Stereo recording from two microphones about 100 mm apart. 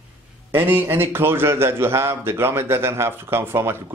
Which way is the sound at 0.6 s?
20° right (ahead or behind).